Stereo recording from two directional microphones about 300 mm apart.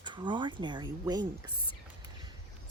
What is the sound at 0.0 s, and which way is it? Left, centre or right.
Speech, centre.